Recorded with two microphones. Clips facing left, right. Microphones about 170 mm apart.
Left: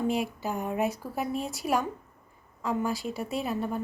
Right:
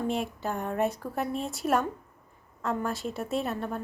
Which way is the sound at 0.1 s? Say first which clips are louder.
Left 1 dB; centre (ahead or behind).